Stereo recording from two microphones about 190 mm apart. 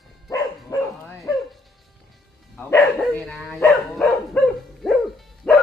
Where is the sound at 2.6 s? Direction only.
10° left (ahead or behind).